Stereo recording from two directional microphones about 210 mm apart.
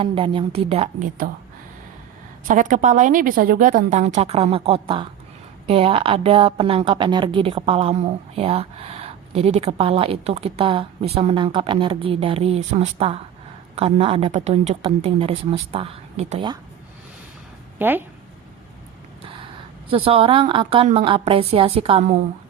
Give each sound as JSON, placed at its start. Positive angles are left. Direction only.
{"t": 0.0, "sound": "a woman's voice", "side_deg": -25}
{"t": 2.5, "sound": "a woman's voice", "side_deg": -40}
{"t": 17.7, "sound": "speech", "side_deg": -10}
{"t": 19.9, "sound": "a woman's voice", "side_deg": -25}